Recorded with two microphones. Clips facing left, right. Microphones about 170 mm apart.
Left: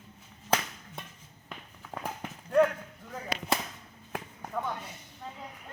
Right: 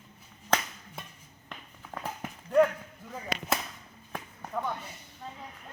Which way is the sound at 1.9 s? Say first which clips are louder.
Left 1 dB; 15° left (ahead or behind).